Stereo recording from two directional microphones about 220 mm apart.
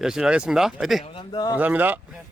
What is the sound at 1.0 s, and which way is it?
Speech, 25° left (ahead or behind).